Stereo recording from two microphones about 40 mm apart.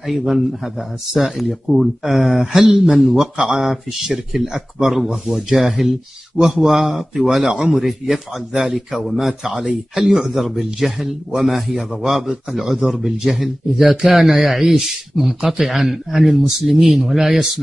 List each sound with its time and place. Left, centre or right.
0.0 s speech: centre
3.2 s a man's voice: centre
4.1 s a man's voice: centre
9.3 s a man's voice: centre